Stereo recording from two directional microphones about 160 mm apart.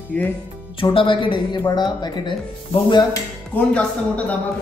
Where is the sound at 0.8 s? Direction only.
35° left (ahead or behind).